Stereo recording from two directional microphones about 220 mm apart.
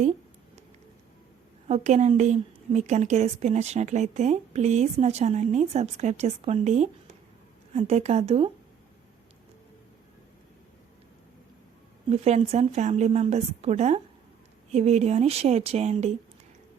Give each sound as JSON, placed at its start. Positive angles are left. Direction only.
{"t": 1.6, "sound": "a woman's voice", "side_deg": -30}
{"t": 12.0, "sound": "a woman's voice", "side_deg": -30}